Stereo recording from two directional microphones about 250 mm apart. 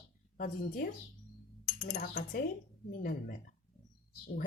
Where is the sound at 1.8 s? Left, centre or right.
Left.